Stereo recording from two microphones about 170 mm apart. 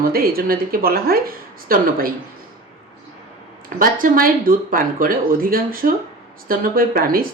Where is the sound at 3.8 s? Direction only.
55° right (ahead or behind).